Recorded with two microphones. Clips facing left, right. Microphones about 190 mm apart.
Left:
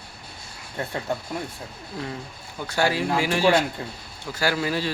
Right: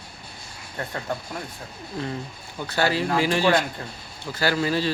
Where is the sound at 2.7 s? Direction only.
10° left (ahead or behind).